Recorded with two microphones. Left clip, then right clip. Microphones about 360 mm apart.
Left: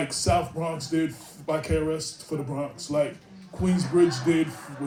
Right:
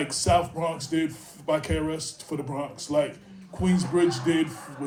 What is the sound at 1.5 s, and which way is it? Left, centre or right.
Speech, centre.